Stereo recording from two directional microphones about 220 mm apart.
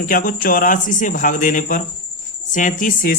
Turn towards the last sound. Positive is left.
turn(degrees=40)  # may be behind; listen again after turning